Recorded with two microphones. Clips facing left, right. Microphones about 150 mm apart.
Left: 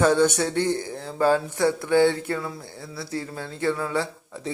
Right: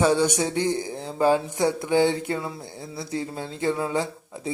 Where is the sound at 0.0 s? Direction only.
10° right (ahead or behind).